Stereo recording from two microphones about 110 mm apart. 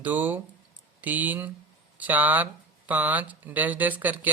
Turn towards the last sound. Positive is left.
turn(degrees=-15)  # may be behind; listen again after turning